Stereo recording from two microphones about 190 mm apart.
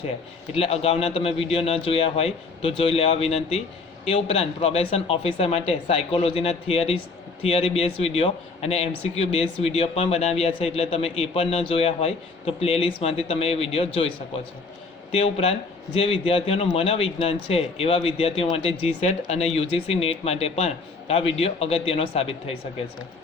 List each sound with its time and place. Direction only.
0.5 s speech: 30° left (ahead or behind)
15.1 s speech: 30° left (ahead or behind)